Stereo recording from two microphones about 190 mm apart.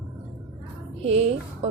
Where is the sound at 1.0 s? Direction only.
35° right (ahead or behind).